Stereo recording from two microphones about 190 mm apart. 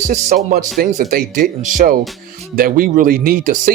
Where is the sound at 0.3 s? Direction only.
45° right (ahead or behind).